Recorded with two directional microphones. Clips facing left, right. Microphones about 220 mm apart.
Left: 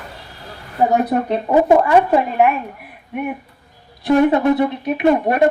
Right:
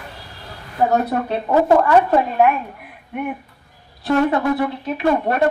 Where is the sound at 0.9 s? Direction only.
15° left (ahead or behind).